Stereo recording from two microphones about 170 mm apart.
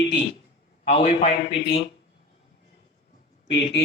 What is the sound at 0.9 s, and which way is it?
Speech, 40° left (ahead or behind).